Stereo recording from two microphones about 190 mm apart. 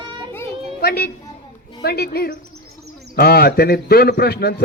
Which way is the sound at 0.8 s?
55° left (ahead or behind).